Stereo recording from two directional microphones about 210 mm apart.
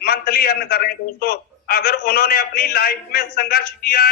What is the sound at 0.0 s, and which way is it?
A man's voice, 45° left (ahead or behind).